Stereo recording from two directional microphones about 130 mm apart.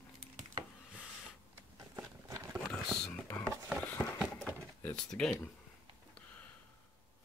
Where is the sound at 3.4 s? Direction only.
5° left (ahead or behind).